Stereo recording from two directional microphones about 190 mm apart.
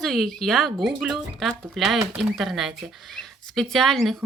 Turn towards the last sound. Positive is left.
turn(degrees=0)  # may be behind; listen again after turning